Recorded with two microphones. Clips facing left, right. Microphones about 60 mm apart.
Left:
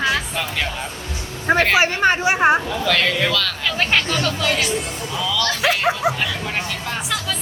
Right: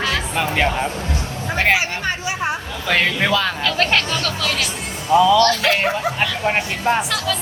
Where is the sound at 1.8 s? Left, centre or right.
Left.